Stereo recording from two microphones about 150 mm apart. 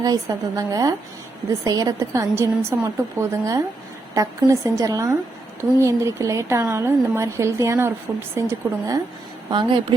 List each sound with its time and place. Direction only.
0.0 s speech: 25° right (ahead or behind)
9.5 s speech: 30° right (ahead or behind)